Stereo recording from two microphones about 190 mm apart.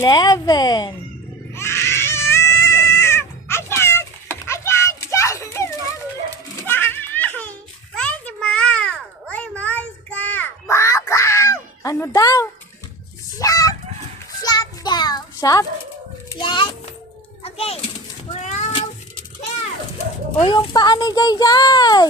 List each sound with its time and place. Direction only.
0.0 s speech: 20° left (ahead or behind)
1.5 s baby cry: 15° left (ahead or behind)
6.3 s giggle: 10° left (ahead or behind)
7.9 s a sound: 5° left (ahead or behind)
13.4 s chicken: 20° left (ahead or behind)
14.4 s child singing: 20° left (ahead or behind)
16.3 s speech: 25° left (ahead or behind)
17.4 s children playing: 30° left (ahead or behind)
18.3 s a sound: 40° left (ahead or behind)
20.4 s speech: 20° left (ahead or behind)